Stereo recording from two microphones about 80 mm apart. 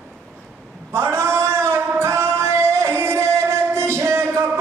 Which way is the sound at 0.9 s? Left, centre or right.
Right.